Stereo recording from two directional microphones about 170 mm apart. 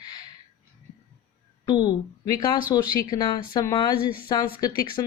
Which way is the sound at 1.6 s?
25° left (ahead or behind).